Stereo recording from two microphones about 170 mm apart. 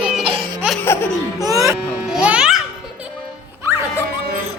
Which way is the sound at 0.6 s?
5° right (ahead or behind).